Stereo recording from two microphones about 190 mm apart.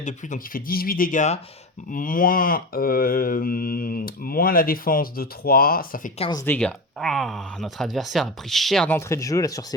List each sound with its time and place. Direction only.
0.0 s mantra: 45° left (ahead or behind)
6.3 s speech: 10° left (ahead or behind)